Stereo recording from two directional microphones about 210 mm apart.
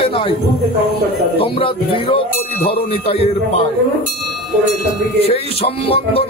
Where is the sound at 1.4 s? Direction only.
25° left (ahead or behind).